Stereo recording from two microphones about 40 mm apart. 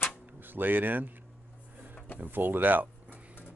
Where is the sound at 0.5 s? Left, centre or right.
Right.